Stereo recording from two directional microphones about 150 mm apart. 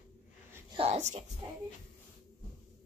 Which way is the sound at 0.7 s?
45° right (ahead or behind).